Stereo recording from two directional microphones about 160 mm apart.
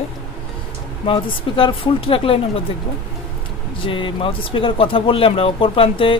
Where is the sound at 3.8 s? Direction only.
30° left (ahead or behind).